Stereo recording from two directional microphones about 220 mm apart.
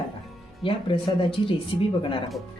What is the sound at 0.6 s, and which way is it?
Speech, 25° left (ahead or behind).